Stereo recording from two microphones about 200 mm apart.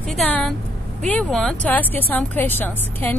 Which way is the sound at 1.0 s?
5° left (ahead or behind).